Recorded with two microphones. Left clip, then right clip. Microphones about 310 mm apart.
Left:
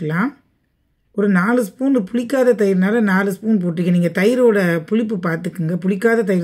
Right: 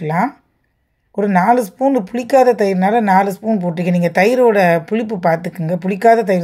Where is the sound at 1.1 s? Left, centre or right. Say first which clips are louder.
Right 4 dB; centre.